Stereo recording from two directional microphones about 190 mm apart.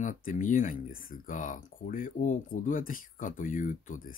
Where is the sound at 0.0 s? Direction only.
45° left (ahead or behind).